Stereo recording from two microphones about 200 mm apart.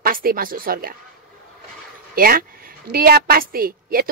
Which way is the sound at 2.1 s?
45° right (ahead or behind).